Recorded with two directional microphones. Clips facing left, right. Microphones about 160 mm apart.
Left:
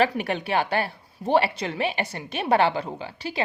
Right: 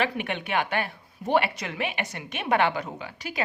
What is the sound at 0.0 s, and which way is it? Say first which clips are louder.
A woman's voice: left 5 dB; 35° left (ahead or behind).